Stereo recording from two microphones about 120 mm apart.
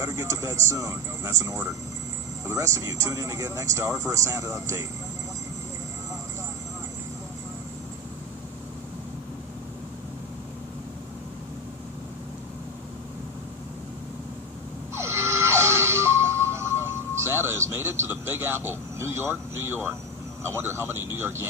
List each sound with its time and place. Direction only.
0.0 s speech: 25° right (ahead or behind)
14.9 s music: 20° right (ahead or behind)
20.4 s speech: 20° right (ahead or behind)